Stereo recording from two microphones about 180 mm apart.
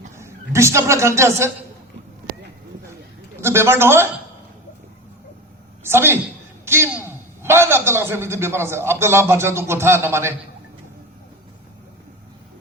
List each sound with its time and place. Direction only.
0.2 s a man's voice: 15° right (ahead or behind)
3.4 s a man's voice: 15° right (ahead or behind)
5.8 s a woman's voice: 15° right (ahead or behind)